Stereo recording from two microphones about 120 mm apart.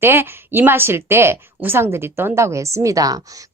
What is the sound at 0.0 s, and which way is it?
A woman's voice, 20° right (ahead or behind).